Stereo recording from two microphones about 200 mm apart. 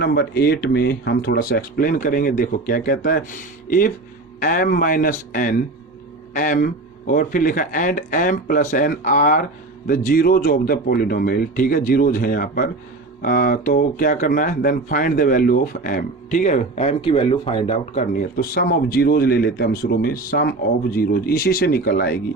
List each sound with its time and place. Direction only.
0.0 s speech: 55° left (ahead or behind)